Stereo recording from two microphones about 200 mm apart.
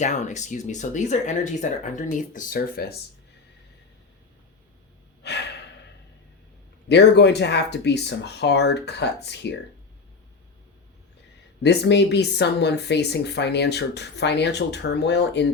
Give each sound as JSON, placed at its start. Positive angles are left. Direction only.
{"t": 0.0, "sound": "speech", "side_deg": 35}
{"t": 5.2, "sound": "gasp", "side_deg": 55}
{"t": 6.8, "sound": "speech", "side_deg": 60}
{"t": 11.6, "sound": "speech", "side_deg": 55}